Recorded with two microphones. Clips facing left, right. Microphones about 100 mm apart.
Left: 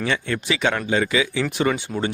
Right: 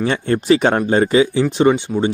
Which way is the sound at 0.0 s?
35° right (ahead or behind).